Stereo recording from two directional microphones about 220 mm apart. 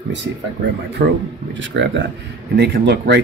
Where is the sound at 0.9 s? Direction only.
50° right (ahead or behind).